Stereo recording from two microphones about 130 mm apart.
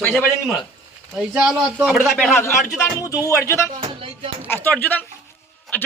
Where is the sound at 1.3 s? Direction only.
5° right (ahead or behind).